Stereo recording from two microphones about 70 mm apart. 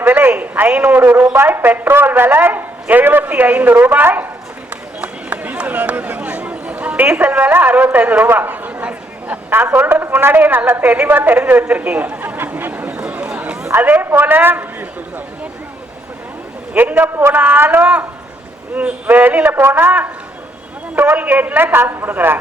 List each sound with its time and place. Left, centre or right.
0.0 s a man's voice: right
4.7 s run: centre
7.2 s a man's voice: right
9.5 s a man's voice: right
11.7 s a sound: right
13.7 s a man's voice: right
16.7 s a man's voice: right
21.1 s a man's voice: right